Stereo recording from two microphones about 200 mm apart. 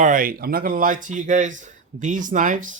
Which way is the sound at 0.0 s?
45° right (ahead or behind).